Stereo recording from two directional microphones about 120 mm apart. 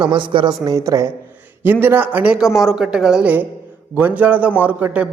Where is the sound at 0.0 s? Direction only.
40° right (ahead or behind); by 2.4 s 15° right (ahead or behind).